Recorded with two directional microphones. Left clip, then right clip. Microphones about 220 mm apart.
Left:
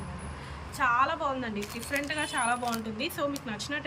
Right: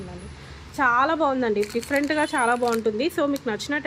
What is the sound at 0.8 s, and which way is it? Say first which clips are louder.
Speech: right 6 dB; 20° right (ahead or behind).